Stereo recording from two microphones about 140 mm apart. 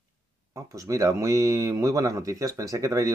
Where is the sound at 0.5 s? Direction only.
25° right (ahead or behind).